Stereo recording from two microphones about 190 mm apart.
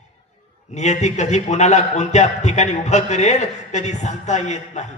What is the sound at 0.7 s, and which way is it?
A man's voice, 35° left (ahead or behind).